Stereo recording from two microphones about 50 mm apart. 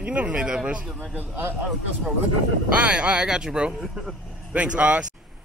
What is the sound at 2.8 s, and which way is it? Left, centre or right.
Speech, right.